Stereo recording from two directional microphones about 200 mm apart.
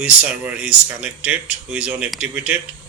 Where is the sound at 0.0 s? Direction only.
5° right (ahead or behind).